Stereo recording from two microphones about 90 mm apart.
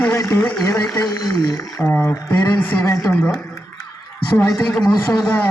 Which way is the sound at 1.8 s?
30° left (ahead or behind).